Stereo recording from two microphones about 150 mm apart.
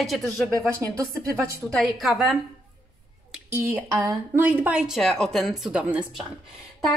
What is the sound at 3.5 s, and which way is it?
Speech, 15° right (ahead or behind).